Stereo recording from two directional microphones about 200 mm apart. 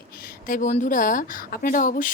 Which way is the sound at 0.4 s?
40° left (ahead or behind).